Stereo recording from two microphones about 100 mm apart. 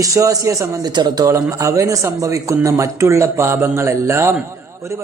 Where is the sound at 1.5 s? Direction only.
30° right (ahead or behind).